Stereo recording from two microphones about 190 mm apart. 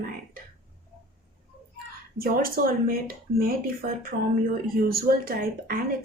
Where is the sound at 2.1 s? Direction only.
50° right (ahead or behind).